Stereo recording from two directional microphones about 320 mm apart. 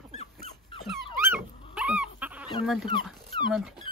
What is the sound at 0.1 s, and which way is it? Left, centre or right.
Dog, centre.